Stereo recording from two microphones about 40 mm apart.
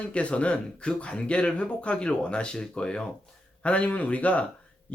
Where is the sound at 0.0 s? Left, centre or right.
Left.